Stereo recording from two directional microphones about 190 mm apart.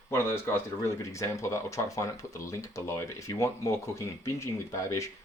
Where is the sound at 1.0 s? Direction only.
15° left (ahead or behind).